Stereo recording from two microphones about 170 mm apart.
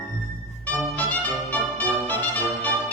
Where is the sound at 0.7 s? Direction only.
10° left (ahead or behind).